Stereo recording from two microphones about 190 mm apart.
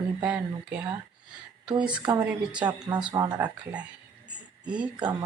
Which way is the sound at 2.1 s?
10° right (ahead or behind).